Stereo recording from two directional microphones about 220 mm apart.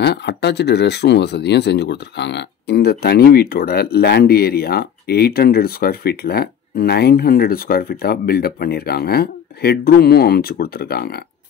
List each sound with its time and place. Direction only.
0.0 s speech: 50° left (ahead or behind)